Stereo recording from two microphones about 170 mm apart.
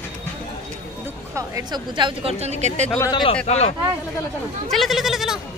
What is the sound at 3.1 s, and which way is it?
Speech, 30° left (ahead or behind).